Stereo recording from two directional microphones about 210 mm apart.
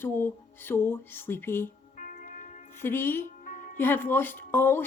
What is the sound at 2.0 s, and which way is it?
Music, 40° left (ahead or behind).